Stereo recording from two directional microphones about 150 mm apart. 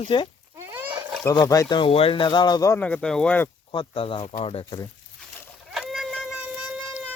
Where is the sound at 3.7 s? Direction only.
35° left (ahead or behind).